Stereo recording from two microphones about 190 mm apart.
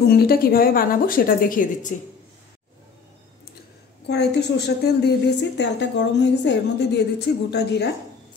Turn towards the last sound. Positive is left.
turn(degrees=60)  # may be behind; listen again after turning